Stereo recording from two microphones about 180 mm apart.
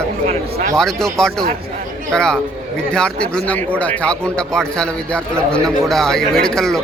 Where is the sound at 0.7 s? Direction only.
5° left (ahead or behind).